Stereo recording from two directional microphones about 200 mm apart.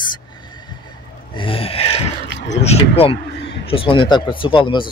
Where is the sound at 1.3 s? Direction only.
25° left (ahead or behind).